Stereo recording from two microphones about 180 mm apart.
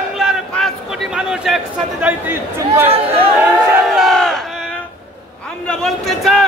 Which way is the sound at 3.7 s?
Centre (ahead or behind).